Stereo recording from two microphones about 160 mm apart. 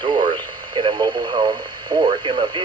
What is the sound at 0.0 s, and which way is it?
Radio, 30° right (ahead or behind).